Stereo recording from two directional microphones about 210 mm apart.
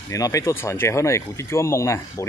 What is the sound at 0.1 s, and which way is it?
Speech, 15° left (ahead or behind).